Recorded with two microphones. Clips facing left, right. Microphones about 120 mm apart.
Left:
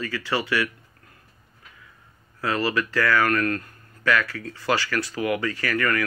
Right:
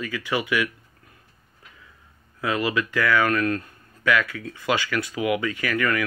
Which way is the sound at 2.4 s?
15° right (ahead or behind).